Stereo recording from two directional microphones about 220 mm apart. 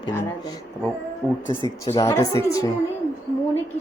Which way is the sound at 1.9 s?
15° left (ahead or behind).